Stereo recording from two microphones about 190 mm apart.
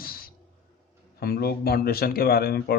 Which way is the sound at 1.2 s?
55° left (ahead or behind).